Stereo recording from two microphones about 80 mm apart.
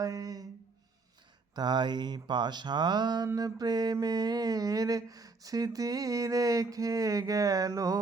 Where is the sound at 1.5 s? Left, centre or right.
Right.